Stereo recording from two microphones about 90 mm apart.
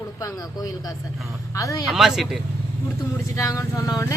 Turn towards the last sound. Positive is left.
turn(degrees=40)  # may be behind; listen again after turning